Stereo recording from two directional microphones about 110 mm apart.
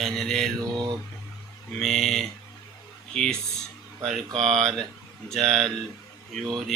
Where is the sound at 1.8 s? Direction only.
Centre (ahead or behind).